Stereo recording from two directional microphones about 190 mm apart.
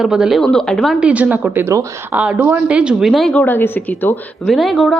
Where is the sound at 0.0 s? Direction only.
5° right (ahead or behind).